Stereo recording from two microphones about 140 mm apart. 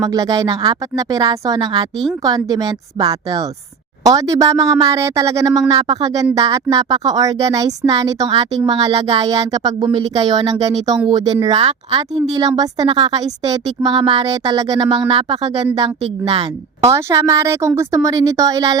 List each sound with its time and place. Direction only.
0.1 s speech: 25° right (ahead or behind)
8.3 s speech: 40° right (ahead or behind)
16.8 s speech: 20° right (ahead or behind)